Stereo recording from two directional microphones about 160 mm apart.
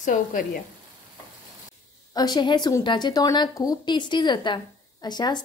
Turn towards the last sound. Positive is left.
turn(degrees=25)  # may be behind; listen again after turning